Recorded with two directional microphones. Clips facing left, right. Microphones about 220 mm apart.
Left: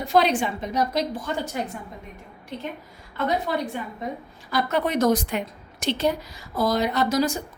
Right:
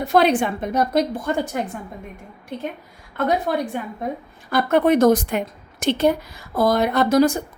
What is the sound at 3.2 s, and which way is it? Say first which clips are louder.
A woman's voice: right 4 dB; 50° right (ahead or behind).